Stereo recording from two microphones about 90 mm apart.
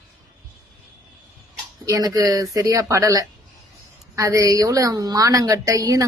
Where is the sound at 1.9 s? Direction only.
45° right (ahead or behind).